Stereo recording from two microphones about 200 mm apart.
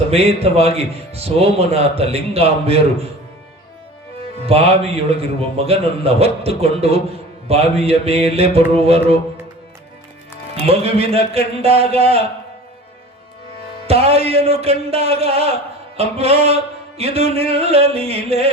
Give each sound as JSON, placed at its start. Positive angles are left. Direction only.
{"t": 0.1, "sound": "a man's voice", "side_deg": -30}
{"t": 4.4, "sound": "a man's voice", "side_deg": -30}
{"t": 10.7, "sound": "a man's voice", "side_deg": -30}
{"t": 13.8, "sound": "a man's voice", "side_deg": -30}